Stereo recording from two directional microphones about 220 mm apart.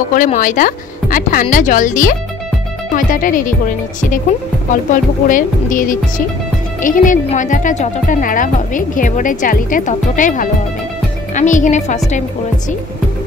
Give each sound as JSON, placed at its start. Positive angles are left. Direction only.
{"t": 0.1, "sound": "speech", "side_deg": 35}
{"t": 4.6, "sound": "speech", "side_deg": 35}